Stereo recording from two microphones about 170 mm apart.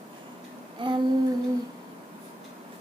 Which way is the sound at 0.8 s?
25° right (ahead or behind).